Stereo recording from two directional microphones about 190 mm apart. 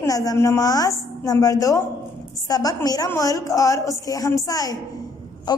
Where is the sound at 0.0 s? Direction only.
20° left (ahead or behind).